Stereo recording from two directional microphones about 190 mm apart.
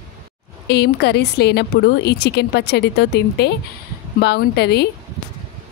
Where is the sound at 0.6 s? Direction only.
60° left (ahead or behind).